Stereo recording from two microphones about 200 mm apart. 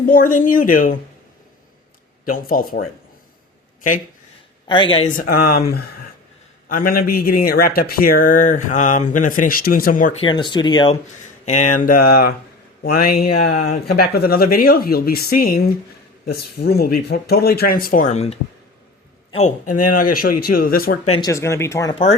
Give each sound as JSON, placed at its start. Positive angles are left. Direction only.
{"t": 0.0, "sound": "speech", "side_deg": 45}
{"t": 2.2, "sound": "speech", "side_deg": 45}
{"t": 4.7, "sound": "speech", "side_deg": 25}
{"t": 5.1, "sound": "speech", "side_deg": 45}
{"t": 10.2, "sound": "speech", "side_deg": 25}
{"t": 11.4, "sound": "speech", "side_deg": 35}
{"t": 21.1, "sound": "speech", "side_deg": 20}